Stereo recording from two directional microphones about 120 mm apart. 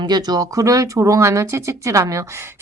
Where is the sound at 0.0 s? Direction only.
35° right (ahead or behind).